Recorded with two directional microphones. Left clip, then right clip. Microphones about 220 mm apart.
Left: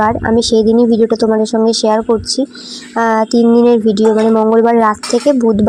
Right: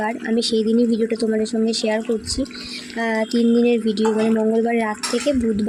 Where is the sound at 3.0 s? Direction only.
5° left (ahead or behind).